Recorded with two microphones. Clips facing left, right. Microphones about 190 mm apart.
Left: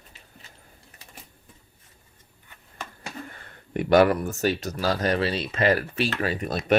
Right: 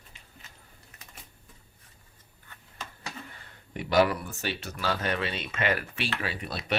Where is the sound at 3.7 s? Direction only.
50° left (ahead or behind).